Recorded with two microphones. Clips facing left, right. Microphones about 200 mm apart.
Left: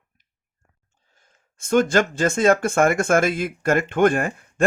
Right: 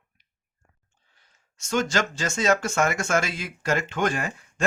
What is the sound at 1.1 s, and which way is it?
Speech, 50° left (ahead or behind).